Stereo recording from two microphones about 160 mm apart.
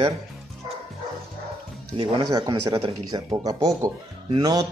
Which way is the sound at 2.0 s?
30° right (ahead or behind).